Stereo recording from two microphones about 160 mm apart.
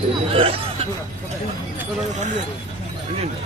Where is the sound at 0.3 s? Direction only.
35° right (ahead or behind).